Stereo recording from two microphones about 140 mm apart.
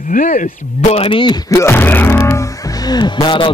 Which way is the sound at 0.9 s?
40° left (ahead or behind).